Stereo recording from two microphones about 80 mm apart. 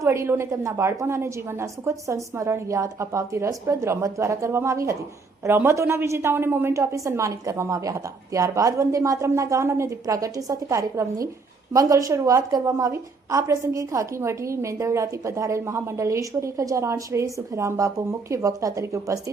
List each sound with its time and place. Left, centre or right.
0.0 s a woman's voice: right